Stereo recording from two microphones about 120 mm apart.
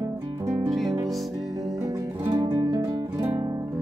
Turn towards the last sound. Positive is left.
turn(degrees=-30)  # may be behind; listen again after turning